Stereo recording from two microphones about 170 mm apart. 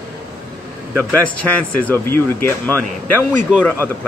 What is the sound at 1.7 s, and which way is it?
Speech, 10° left (ahead or behind).